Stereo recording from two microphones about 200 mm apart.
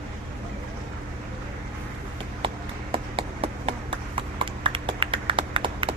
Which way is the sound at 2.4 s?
25° right (ahead or behind).